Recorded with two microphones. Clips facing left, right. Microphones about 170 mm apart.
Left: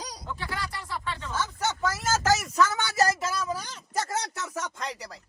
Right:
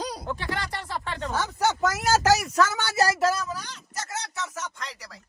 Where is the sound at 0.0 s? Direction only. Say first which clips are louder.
Right 6 dB; 55° right (ahead or behind).